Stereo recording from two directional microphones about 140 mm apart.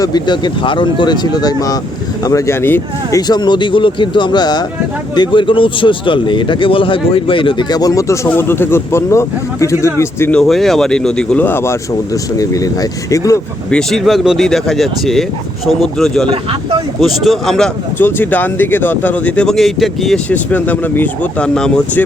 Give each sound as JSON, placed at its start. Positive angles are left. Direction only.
{"t": 0.0, "sound": "speech", "side_deg": 30}
{"t": 3.2, "sound": "speech", "side_deg": 30}
{"t": 10.3, "sound": "speech", "side_deg": 0}
{"t": 13.7, "sound": "speech", "side_deg": 5}
{"t": 17.9, "sound": "speech", "side_deg": 15}
{"t": 20.3, "sound": "speech", "side_deg": 10}